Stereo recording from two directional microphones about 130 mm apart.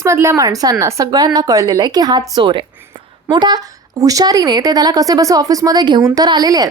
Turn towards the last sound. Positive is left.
turn(degrees=-30)  # may be behind; listen again after turning